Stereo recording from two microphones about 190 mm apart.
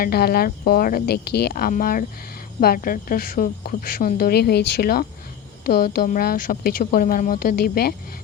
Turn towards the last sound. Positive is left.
turn(degrees=55)  # may be behind; listen again after turning